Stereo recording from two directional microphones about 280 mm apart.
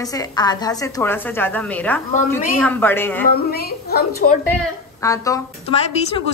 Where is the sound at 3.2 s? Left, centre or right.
Left.